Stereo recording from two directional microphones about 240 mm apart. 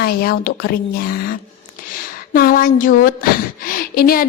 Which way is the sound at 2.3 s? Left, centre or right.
Left.